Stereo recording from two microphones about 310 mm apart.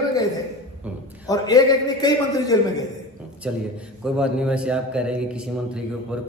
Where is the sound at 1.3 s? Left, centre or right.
Centre.